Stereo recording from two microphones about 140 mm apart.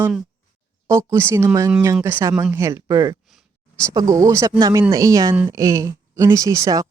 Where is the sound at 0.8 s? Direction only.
20° right (ahead or behind).